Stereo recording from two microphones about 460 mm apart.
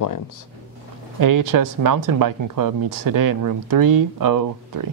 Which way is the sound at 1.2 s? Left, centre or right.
Right.